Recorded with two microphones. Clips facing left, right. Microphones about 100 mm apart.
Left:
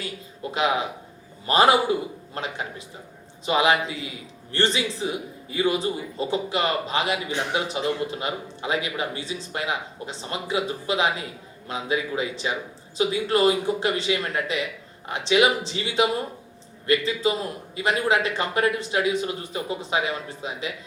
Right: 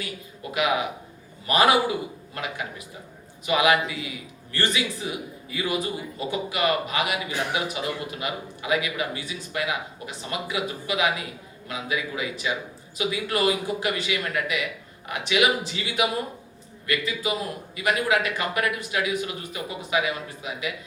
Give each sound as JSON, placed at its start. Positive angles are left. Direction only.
{"t": 0.5, "sound": "a man's voice", "side_deg": 30}